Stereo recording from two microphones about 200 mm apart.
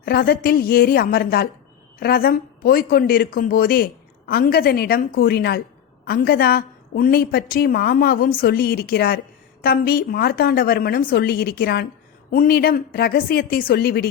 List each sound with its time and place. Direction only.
0.0 s a woman's voice: 50° left (ahead or behind)